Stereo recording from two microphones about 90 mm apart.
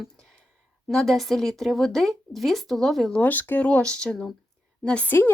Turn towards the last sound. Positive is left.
turn(degrees=25)  # may be behind; listen again after turning